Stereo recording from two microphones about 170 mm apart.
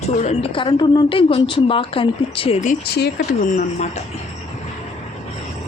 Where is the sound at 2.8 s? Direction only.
75° left (ahead or behind).